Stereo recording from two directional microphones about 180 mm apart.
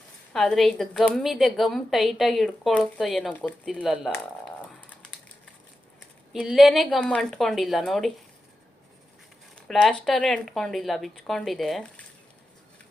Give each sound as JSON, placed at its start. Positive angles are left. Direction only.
{"t": 0.3, "sound": "a woman's voice", "side_deg": 0}
{"t": 6.4, "sound": "a woman's voice", "side_deg": 0}
{"t": 9.6, "sound": "a woman's voice", "side_deg": 5}